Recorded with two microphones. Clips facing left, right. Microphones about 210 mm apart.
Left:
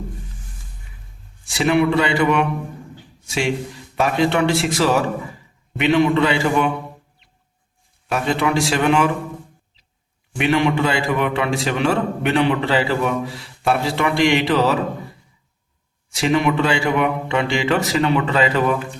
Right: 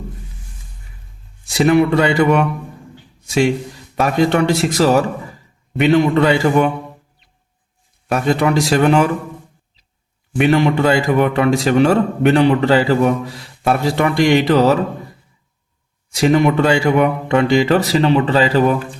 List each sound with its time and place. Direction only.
1.5 s a man's voice: 40° right (ahead or behind)
3.9 s a man's voice: 40° right (ahead or behind)
8.1 s speech: 40° right (ahead or behind)
10.3 s a man's voice: 40° right (ahead or behind)
16.0 s speech: 40° right (ahead or behind)